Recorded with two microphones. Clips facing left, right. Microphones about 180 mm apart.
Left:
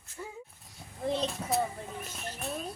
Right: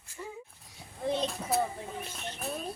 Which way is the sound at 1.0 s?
Centre (ahead or behind).